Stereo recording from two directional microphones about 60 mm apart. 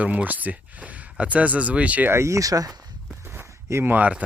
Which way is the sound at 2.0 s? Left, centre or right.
Right.